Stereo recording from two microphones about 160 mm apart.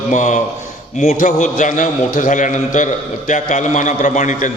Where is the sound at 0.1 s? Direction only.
50° left (ahead or behind).